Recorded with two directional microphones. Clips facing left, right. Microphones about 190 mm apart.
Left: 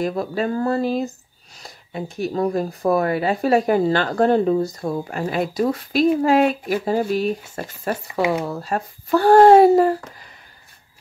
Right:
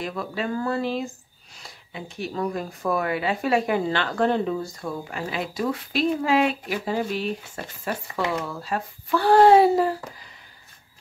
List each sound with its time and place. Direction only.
0.0 s speech: 40° left (ahead or behind)